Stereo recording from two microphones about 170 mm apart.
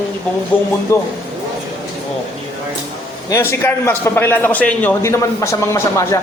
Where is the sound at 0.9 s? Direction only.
15° left (ahead or behind).